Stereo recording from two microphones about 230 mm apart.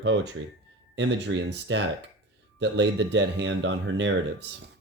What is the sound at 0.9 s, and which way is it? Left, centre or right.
Speech, right.